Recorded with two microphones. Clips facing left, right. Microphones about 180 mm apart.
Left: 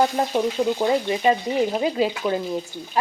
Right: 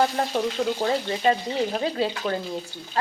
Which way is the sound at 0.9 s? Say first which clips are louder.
Left 2 dB; 15° left (ahead or behind).